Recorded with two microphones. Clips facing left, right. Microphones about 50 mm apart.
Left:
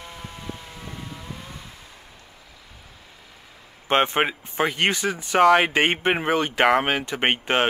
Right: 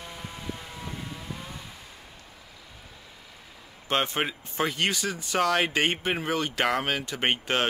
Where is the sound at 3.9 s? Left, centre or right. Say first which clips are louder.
Left 6 dB; left.